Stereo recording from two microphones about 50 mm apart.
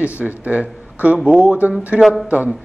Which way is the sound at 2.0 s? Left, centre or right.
Centre.